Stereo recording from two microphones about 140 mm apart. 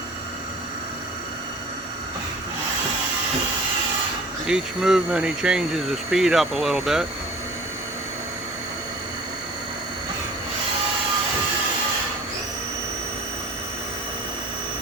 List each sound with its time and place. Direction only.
4.4 s speech: 5° right (ahead or behind)